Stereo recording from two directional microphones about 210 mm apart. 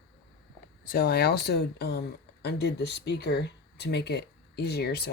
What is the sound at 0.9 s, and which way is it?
Speech, 45° left (ahead or behind).